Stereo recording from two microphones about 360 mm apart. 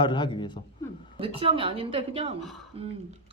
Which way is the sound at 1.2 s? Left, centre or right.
Centre.